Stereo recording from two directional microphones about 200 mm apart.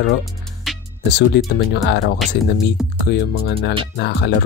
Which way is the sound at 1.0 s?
55° left (ahead or behind).